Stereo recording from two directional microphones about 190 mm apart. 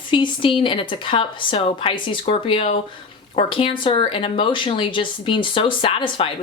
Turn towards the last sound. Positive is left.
turn(degrees=25)  # may be behind; listen again after turning